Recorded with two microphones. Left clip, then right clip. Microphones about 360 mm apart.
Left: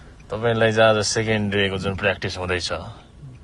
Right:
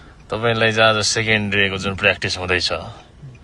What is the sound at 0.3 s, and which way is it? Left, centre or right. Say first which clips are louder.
Speech: right 2 dB; centre.